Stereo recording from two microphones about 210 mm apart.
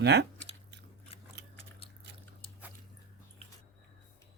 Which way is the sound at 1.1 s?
30° left (ahead or behind).